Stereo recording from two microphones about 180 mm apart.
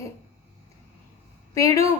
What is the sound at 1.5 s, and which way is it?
Speech, 20° left (ahead or behind).